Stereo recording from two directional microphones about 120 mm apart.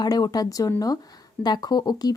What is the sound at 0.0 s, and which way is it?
A woman's voice, 30° left (ahead or behind).